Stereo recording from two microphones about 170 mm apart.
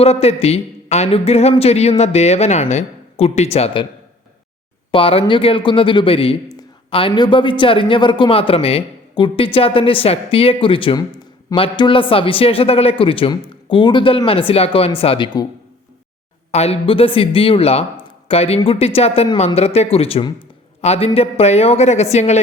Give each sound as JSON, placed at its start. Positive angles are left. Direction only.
{"t": 0.0, "sound": "a man's voice", "side_deg": 35}
{"t": 4.9, "sound": "a man's voice", "side_deg": 30}
{"t": 16.5, "sound": "a man's voice", "side_deg": 40}